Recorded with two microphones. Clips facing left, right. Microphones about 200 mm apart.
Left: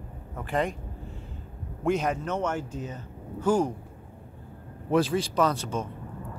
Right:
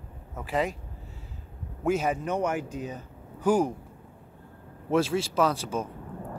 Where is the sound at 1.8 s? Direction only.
5° right (ahead or behind).